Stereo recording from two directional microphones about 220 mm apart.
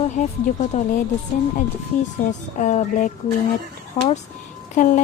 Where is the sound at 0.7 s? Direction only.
35° left (ahead or behind).